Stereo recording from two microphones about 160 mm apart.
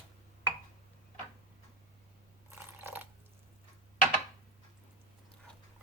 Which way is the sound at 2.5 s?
15° right (ahead or behind).